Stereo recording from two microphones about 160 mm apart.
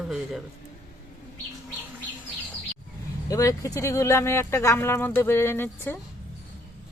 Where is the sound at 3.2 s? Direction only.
20° left (ahead or behind).